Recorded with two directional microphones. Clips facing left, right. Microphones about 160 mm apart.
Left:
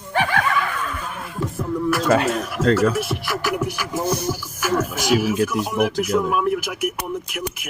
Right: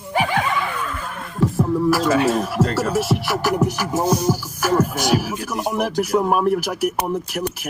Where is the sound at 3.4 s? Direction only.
40° right (ahead or behind).